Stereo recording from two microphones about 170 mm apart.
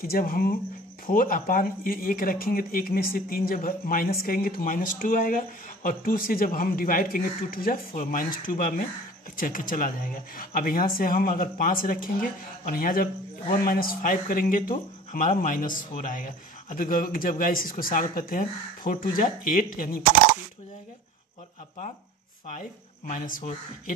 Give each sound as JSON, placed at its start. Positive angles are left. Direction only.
{"t": 0.0, "sound": "speech", "side_deg": 60}
{"t": 22.5, "sound": "speech", "side_deg": 50}